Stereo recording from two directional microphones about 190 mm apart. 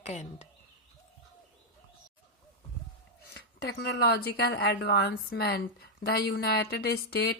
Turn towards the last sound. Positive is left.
turn(degrees=55)  # may be behind; listen again after turning